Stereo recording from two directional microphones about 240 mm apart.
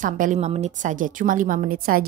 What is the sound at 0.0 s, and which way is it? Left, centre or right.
A woman's voice, right.